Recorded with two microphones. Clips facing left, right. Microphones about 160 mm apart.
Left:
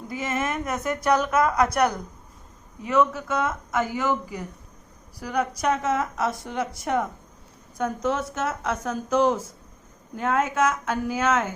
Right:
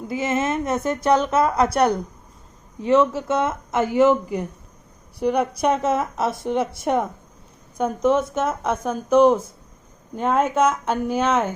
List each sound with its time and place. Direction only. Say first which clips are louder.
0.1 s speech: right 5 dB; 25° right (ahead or behind)